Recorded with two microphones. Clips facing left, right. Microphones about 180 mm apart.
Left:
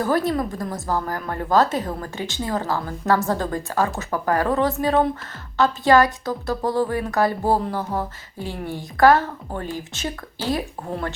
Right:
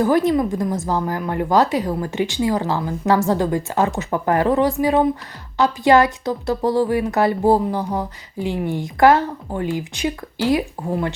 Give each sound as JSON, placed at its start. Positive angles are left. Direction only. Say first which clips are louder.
{"t": 0.0, "sound": "a woman's voice", "louder": "right 5 dB", "side_deg": -20}